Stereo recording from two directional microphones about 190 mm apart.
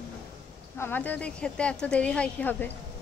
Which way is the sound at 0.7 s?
10° left (ahead or behind).